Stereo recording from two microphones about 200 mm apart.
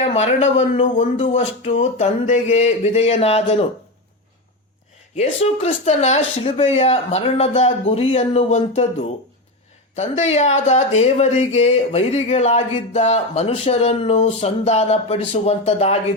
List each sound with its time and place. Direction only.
0.0 s speech: 30° left (ahead or behind)
5.1 s speech: 35° left (ahead or behind)